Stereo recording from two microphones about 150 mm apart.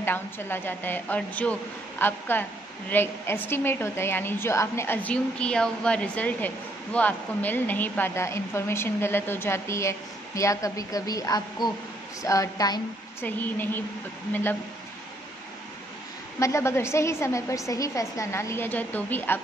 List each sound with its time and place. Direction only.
0.0 s a woman's voice: 15° left (ahead or behind)
13.2 s a woman's voice: 15° left (ahead or behind)
16.3 s a woman's voice: 20° left (ahead or behind)